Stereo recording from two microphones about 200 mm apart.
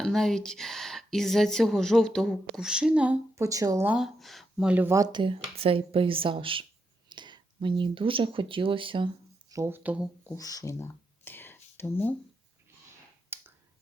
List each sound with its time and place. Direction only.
0.0 s speech: centre (ahead or behind); by 3.9 s 15° right (ahead or behind)
3.9 s speech: centre (ahead or behind); by 9.0 s 25° right (ahead or behind)
9.5 s speech: 15° right (ahead or behind)
10.2 s a sound: 15° left (ahead or behind)
13.3 s finger snapping: 10° right (ahead or behind)